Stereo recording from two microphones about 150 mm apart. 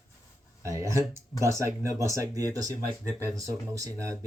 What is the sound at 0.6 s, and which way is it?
Speech, 20° right (ahead or behind).